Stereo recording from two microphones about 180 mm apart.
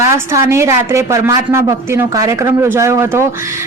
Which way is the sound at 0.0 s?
15° right (ahead or behind).